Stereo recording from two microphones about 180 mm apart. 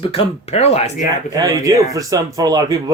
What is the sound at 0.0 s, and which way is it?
Speech, 35° left (ahead or behind).